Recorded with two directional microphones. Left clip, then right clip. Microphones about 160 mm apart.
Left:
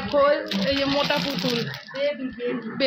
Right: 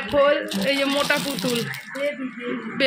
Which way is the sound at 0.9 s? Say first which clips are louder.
Right 1 dB; centre (ahead or behind).